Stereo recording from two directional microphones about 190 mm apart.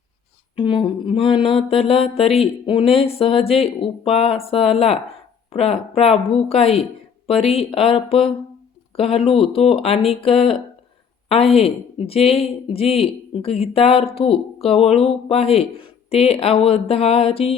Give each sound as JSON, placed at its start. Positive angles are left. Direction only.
{"t": 0.5, "sound": "a woman's voice", "side_deg": 25}